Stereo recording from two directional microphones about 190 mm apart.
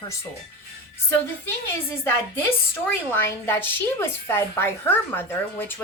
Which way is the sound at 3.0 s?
10° left (ahead or behind).